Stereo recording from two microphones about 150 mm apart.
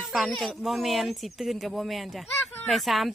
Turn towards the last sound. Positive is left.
turn(degrees=0)  # may be behind; listen again after turning